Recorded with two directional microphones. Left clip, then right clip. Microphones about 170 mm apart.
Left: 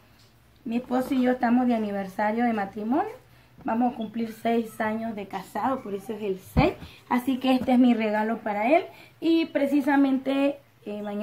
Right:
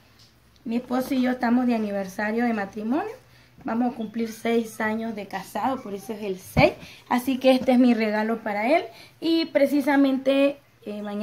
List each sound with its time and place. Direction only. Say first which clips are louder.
0.7 s a woman's voice: right 1 dB; 30° right (ahead or behind)